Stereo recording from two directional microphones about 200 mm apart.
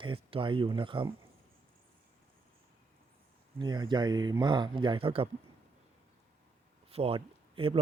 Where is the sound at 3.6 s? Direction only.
20° right (ahead or behind).